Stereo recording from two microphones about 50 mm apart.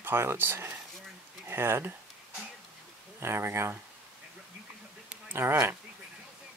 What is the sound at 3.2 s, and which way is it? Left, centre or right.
Speech, right.